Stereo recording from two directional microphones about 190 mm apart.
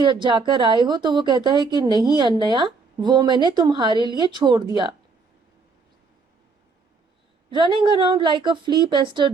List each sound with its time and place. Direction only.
0.0 s speech: 25° right (ahead or behind)
7.5 s speech: 25° right (ahead or behind)